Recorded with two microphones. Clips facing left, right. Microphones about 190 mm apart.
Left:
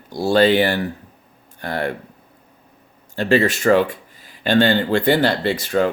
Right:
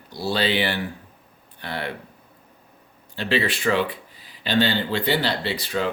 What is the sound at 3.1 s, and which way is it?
Speech, 45° left (ahead or behind).